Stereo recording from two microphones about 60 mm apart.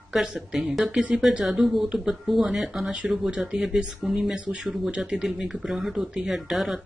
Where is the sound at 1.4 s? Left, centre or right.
Centre.